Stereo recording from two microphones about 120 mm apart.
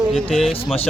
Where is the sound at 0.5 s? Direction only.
55° left (ahead or behind).